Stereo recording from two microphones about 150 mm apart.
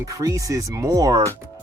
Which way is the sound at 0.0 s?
20° right (ahead or behind).